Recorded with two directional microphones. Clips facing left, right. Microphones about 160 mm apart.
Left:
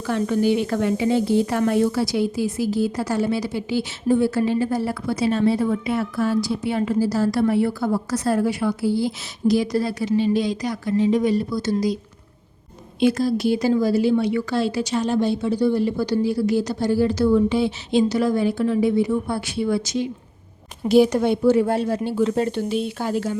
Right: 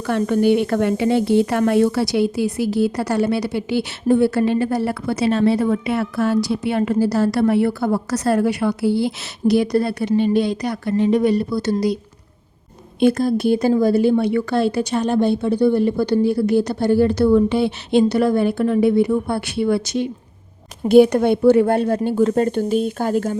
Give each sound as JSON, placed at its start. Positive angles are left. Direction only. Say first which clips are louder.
{"t": 0.1, "sound": "a woman's voice", "louder": "right 4 dB", "side_deg": -60}
{"t": 13.0, "sound": "a woman's voice", "louder": "right 3 dB", "side_deg": -55}